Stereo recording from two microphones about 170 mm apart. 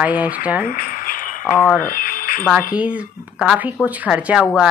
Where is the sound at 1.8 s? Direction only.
55° left (ahead or behind).